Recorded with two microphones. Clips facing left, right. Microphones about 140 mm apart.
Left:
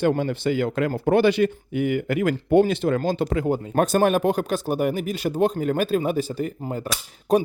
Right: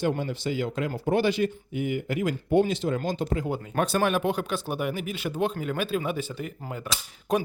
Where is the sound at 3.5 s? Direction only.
45° left (ahead or behind).